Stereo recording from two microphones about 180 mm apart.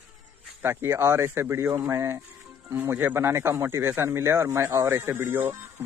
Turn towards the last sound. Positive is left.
turn(degrees=-10)  # may be behind; listen again after turning